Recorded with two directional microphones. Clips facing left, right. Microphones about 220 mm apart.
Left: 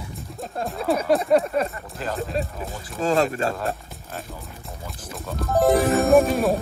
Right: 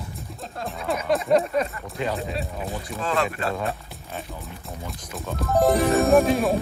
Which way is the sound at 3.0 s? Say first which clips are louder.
Left 5 dB; 40° left (ahead or behind).